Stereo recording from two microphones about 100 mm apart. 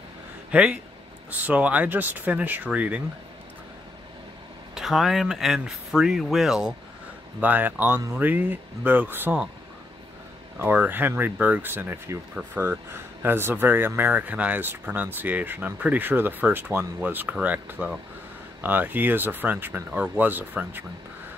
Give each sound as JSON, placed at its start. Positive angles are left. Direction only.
{"t": 0.5, "sound": "speech", "side_deg": -10}
{"t": 4.7, "sound": "speech", "side_deg": -5}
{"t": 7.3, "sound": "speech", "side_deg": -15}
{"t": 10.6, "sound": "speech", "side_deg": -20}